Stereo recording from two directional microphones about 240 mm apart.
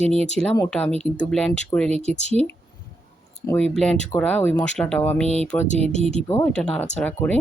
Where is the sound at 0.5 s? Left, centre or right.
Centre.